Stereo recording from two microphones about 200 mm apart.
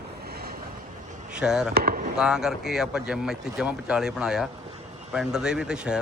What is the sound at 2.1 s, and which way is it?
Speech, 5° right (ahead or behind).